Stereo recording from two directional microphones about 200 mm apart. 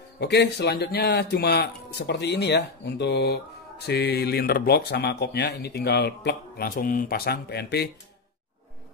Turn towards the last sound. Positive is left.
turn(degrees=55)  # may be behind; listen again after turning